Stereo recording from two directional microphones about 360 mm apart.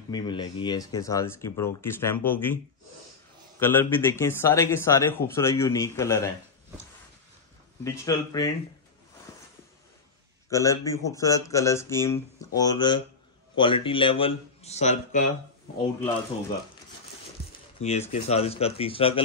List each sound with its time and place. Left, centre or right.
0.1 s speech: centre
7.8 s speech: centre
9.3 s a sound: centre
10.5 s a man's voice: centre
17.8 s speech: centre